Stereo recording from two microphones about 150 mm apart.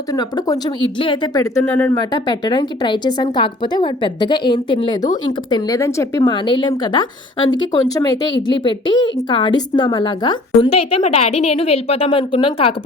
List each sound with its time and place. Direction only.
0.1 s speech: 25° left (ahead or behind)
1.6 s speech: 10° left (ahead or behind)
2.0 s a woman's voice: 30° left (ahead or behind)
6.2 s a woman's voice: 35° left (ahead or behind)